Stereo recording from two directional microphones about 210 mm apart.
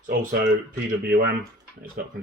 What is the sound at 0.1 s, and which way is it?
Speech, 45° right (ahead or behind).